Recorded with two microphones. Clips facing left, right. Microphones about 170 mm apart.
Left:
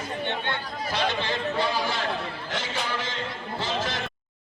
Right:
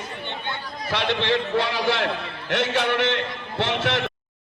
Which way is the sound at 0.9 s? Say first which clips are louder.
Right 5 dB; 75° right (ahead or behind).